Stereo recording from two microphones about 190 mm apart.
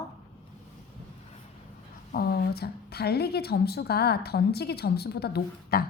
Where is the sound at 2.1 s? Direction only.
55° left (ahead or behind).